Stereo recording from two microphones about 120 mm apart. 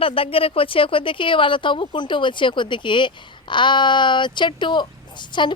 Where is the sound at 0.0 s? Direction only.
50° left (ahead or behind).